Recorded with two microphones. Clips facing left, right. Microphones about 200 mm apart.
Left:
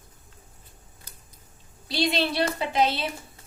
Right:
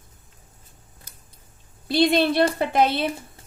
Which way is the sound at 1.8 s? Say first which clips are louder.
Right 7 dB; 55° right (ahead or behind).